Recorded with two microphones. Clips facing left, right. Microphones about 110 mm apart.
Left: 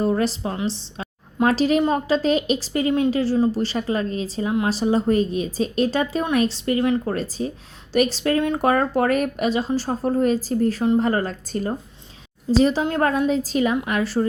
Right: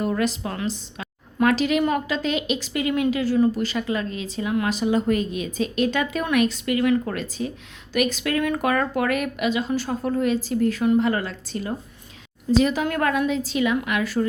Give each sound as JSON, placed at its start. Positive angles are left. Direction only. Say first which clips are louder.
{"t": 0.0, "sound": "a woman's voice", "louder": "left 3 dB", "side_deg": 35}